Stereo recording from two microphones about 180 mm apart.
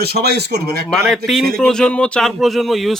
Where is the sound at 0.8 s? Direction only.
Centre (ahead or behind).